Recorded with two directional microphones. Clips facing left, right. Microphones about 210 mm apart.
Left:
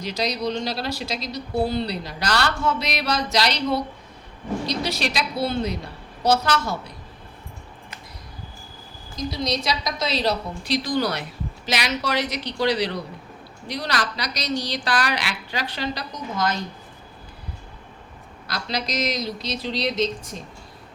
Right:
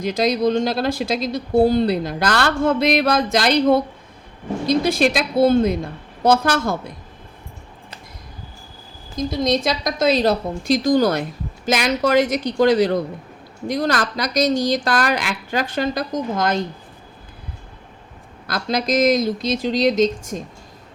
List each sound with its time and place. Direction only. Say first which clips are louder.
0.0 s speech: right 7 dB; 50° right (ahead or behind)
9.1 s speech: right 6 dB; 50° right (ahead or behind)
18.4 s speech: right 7 dB; 50° right (ahead or behind)